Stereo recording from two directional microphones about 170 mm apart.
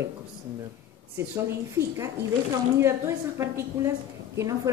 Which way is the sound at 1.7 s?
15° right (ahead or behind).